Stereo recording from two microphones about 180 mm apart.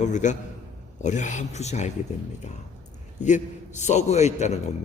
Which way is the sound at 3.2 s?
40° left (ahead or behind).